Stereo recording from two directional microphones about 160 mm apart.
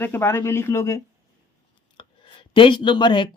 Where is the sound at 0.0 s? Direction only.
15° left (ahead or behind).